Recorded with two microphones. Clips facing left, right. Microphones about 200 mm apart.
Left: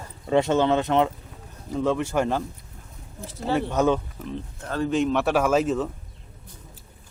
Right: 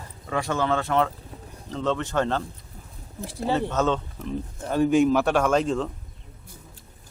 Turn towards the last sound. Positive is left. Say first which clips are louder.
# left 1 dB
turn(degrees=5)  # may be behind; listen again after turning